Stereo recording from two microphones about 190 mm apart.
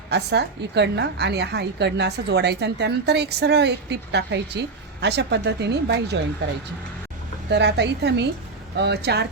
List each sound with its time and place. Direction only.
0.1 s a woman's voice: 65° right (ahead or behind)
7.5 s a woman's voice: 65° right (ahead or behind)